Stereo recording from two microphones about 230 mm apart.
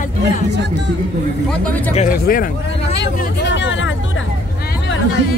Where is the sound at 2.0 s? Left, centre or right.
Left.